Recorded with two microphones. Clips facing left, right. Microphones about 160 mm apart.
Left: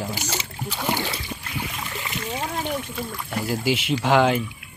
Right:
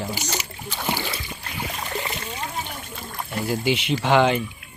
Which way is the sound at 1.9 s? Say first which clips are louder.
Right 3 dB; 35° right (ahead or behind).